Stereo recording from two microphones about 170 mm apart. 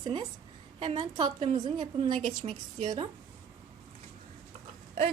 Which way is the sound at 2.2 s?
40° right (ahead or behind).